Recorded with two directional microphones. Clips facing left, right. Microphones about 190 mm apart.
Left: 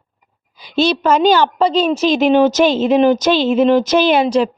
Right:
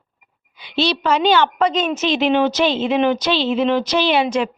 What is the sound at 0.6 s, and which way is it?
A woman's voice, 45° left (ahead or behind).